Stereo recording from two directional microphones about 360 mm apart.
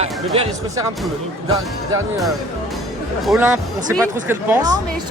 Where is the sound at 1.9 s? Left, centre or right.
Centre.